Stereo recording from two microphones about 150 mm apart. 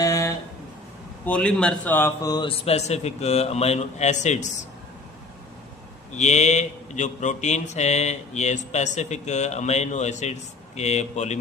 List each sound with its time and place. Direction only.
0.0 s a sound: 20° left (ahead or behind)
1.2 s a man's voice: 5° left (ahead or behind)
2.6 s mantra: 45° left (ahead or behind)
6.1 s mantra: 50° left (ahead or behind)